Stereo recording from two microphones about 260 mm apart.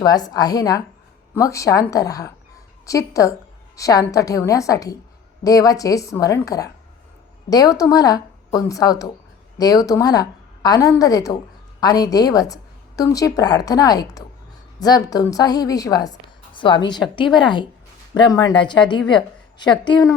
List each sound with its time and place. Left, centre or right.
0.0 s a woman's voice: centre